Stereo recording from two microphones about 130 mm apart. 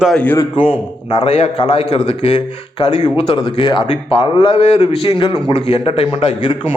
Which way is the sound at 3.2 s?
40° left (ahead or behind).